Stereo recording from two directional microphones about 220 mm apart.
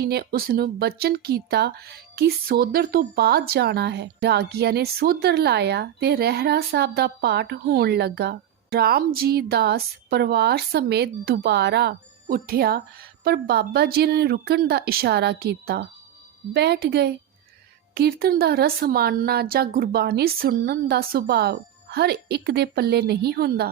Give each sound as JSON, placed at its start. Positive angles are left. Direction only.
{"t": 0.0, "sound": "speech", "side_deg": -45}